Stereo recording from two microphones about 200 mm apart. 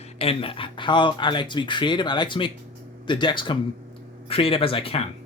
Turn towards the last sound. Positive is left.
turn(degrees=25)  # may be behind; listen again after turning